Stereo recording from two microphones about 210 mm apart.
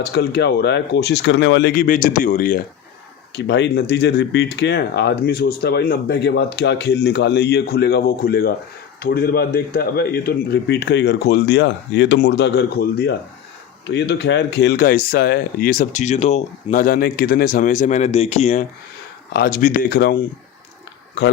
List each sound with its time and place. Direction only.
0.0 s speech: 50° left (ahead or behind)
3.3 s speech: 55° left (ahead or behind); by 18.6 s 30° left (ahead or behind)
19.3 s speech: 45° left (ahead or behind)